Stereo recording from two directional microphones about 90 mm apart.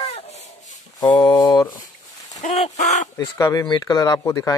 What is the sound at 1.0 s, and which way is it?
Speech, 50° left (ahead or behind).